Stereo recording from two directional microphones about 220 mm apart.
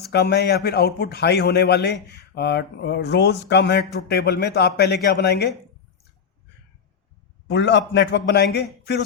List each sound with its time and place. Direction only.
0.0 s a man's voice: 50° left (ahead or behind)
7.4 s a man's voice: 50° left (ahead or behind)